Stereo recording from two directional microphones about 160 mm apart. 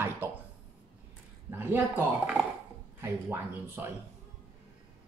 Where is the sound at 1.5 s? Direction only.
15° right (ahead or behind).